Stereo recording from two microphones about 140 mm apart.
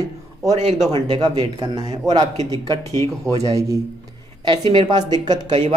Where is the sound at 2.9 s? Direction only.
50° right (ahead or behind).